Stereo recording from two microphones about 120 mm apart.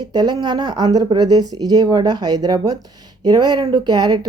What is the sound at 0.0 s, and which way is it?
Speech, 35° right (ahead or behind).